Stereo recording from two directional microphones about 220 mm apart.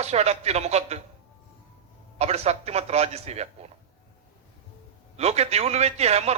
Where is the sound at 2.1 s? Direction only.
30° right (ahead or behind).